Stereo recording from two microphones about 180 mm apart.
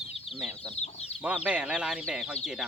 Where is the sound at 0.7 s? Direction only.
35° left (ahead or behind).